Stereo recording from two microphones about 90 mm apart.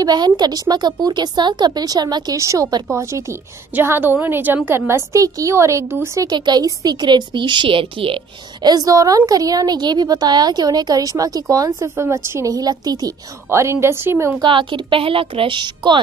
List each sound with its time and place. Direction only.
0.0 s a woman's voice: 50° right (ahead or behind)
2.3 s a woman's voice: 35° right (ahead or behind)
6.2 s a woman's voice: 50° right (ahead or behind); by 8.2 s 80° right
8.6 s a woman's voice: 40° right (ahead or behind)
13.5 s a woman's voice: 30° right (ahead or behind)
14.4 s a woman's voice: 65° right (ahead or behind)